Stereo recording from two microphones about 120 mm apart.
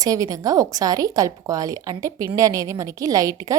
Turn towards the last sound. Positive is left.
turn(degrees=-30)  # may be behind; listen again after turning